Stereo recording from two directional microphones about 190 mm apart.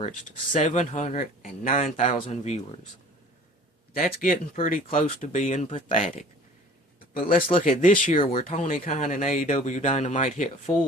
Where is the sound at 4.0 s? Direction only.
50° left (ahead or behind).